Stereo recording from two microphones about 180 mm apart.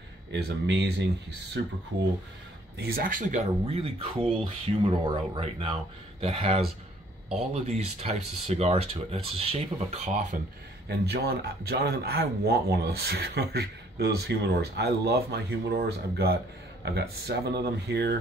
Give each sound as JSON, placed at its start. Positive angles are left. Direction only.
{"t": 0.3, "sound": "speech", "side_deg": -70}
{"t": 1.6, "sound": "speech", "side_deg": -90}
{"t": 2.8, "sound": "speech", "side_deg": -55}
{"t": 10.9, "sound": "speech", "side_deg": -65}